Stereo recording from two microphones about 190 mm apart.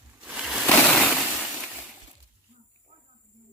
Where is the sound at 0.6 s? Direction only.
10° left (ahead or behind).